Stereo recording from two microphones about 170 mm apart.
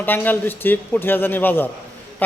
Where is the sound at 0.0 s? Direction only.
10° left (ahead or behind).